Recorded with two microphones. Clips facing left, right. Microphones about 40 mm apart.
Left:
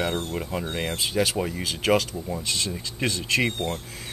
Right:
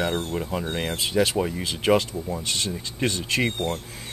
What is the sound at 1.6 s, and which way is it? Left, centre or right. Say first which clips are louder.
Speech: even; right.